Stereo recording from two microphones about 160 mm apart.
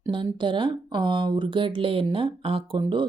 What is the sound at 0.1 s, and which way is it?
Speech, 30° right (ahead or behind).